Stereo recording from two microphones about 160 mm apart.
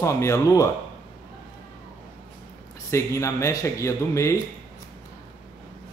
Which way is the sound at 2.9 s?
20° left (ahead or behind).